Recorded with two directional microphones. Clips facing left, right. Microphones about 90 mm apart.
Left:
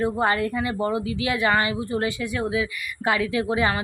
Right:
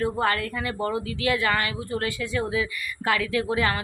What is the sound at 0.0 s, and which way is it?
Speech, 20° left (ahead or behind).